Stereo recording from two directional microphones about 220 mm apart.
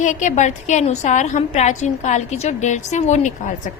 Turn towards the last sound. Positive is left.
turn(degrees=35)  # may be behind; listen again after turning